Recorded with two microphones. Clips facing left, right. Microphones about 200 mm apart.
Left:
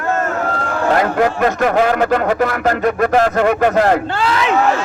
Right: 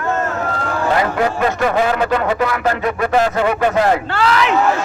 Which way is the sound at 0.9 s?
50° left (ahead or behind).